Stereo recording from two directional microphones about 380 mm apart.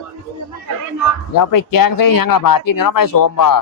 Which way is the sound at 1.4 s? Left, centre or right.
Left.